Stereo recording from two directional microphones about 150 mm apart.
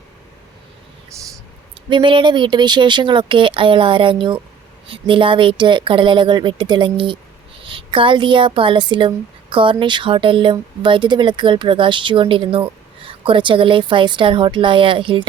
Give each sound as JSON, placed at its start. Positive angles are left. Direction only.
{"t": 1.9, "sound": "a woman's voice", "side_deg": -35}